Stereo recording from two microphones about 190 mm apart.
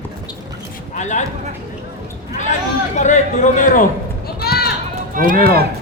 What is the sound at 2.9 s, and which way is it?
Speech, 40° left (ahead or behind).